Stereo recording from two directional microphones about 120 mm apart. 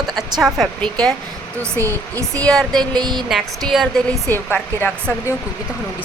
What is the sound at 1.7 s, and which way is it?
Speech, 25° right (ahead or behind).